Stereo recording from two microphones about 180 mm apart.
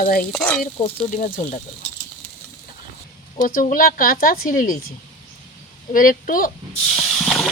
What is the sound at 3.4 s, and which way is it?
Speech, 50° left (ahead or behind).